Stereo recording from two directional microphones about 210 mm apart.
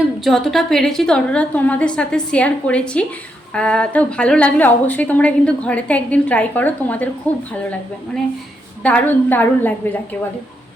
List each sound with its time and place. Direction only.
0.3 s a woman's voice: centre (ahead or behind)